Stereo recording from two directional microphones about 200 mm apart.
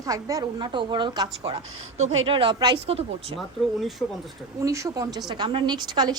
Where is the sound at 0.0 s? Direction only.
15° right (ahead or behind).